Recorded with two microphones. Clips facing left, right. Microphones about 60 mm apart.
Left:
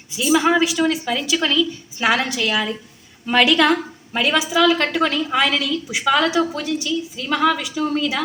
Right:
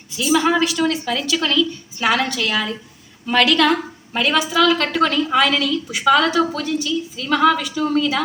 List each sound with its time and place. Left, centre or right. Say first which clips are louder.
0.2 s a woman's voice: even; centre